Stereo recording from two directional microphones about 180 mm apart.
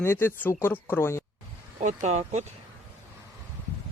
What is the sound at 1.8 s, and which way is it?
Speech, 40° right (ahead or behind).